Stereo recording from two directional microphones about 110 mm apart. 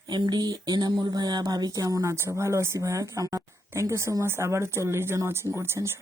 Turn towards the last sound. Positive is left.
turn(degrees=-25)  # may be behind; listen again after turning